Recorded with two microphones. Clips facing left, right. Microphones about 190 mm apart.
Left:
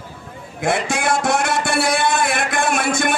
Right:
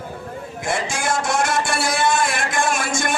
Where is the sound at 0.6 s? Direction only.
60° left (ahead or behind).